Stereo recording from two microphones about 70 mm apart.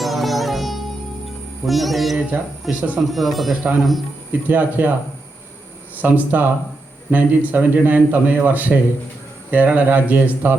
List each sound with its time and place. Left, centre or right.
0.0 s music: centre
2.3 s a man's voice: centre
3.1 s music: centre
4.3 s a man's voice: right
6.0 s a man's voice: right